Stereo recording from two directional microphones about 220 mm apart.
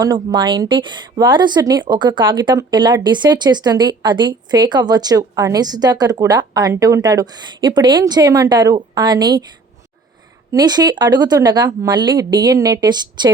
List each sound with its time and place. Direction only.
0.0 s speech: 20° right (ahead or behind)
10.5 s speech: 20° right (ahead or behind)